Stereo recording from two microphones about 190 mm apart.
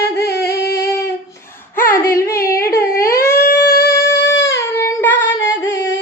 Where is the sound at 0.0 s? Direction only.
60° left (ahead or behind).